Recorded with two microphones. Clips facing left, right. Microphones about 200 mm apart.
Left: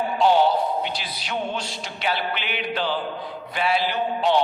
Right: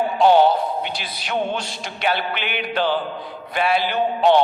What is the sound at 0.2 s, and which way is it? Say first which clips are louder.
Music: right 4 dB; 55° right (ahead or behind).